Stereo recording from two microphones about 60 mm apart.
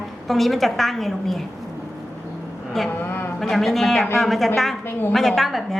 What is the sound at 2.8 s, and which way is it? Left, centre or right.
A woman's voice, centre.